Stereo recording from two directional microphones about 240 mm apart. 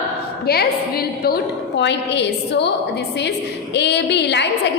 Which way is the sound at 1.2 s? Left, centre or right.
Left.